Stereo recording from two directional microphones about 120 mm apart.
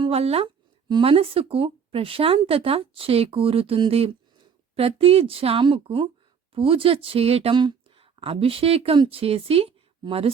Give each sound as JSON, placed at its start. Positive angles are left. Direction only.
{"t": 0.1, "sound": "speech", "side_deg": -55}
{"t": 0.9, "sound": "speech", "side_deg": -45}
{"t": 7.5, "sound": "speech", "side_deg": -40}